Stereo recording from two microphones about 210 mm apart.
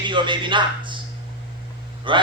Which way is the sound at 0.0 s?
20° right (ahead or behind).